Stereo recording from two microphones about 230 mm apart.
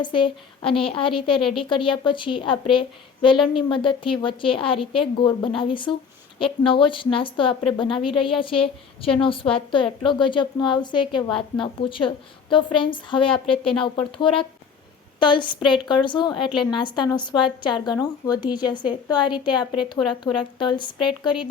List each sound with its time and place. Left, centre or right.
0.0 s a woman's voice: left
16.4 s a woman's voice: centre
16.7 s a woman's voice: centre